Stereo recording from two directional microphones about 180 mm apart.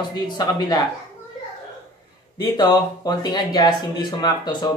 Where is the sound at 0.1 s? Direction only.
20° left (ahead or behind).